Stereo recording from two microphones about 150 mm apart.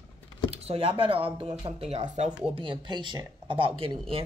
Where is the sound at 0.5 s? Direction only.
40° right (ahead or behind).